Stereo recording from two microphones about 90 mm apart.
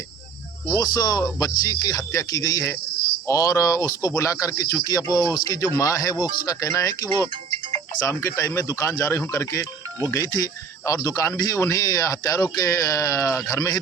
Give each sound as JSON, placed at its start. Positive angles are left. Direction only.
{"t": 0.8, "sound": "speech", "side_deg": 45}